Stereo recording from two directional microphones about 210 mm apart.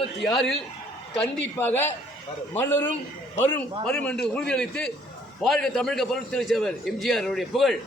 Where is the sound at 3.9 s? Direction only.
5° left (ahead or behind).